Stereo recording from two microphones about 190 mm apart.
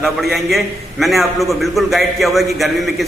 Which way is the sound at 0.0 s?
Centre (ahead or behind).